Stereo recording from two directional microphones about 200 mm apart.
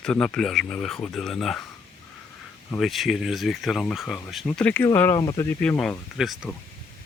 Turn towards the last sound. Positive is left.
turn(degrees=0)  # may be behind; listen again after turning